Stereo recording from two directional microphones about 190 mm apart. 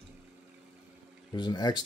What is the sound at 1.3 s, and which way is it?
Speech, 20° left (ahead or behind).